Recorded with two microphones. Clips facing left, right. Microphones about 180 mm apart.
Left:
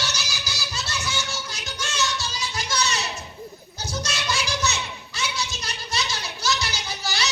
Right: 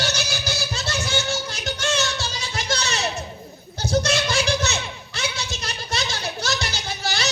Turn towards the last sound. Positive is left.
turn(degrees=-55)  # may be behind; listen again after turning